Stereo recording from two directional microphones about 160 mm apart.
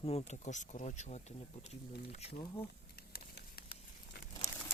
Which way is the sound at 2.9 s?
75° left (ahead or behind).